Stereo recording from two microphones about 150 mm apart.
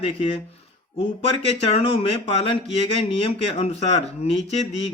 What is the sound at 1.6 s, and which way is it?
Speech, 40° left (ahead or behind).